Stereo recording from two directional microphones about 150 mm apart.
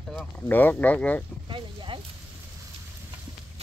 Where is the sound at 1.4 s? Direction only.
35° right (ahead or behind).